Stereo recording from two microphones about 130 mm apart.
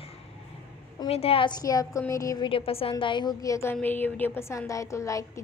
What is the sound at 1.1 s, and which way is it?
A woman's voice, 50° left (ahead or behind).